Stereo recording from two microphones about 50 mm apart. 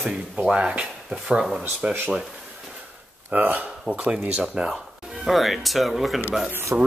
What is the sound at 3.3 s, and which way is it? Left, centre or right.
Speech, right.